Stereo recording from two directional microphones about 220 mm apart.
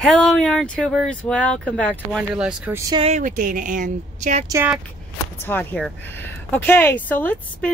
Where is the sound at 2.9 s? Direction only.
25° right (ahead or behind).